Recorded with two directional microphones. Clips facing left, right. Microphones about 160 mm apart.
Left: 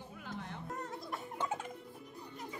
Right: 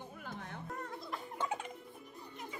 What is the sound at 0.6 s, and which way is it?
Music, 20° left (ahead or behind).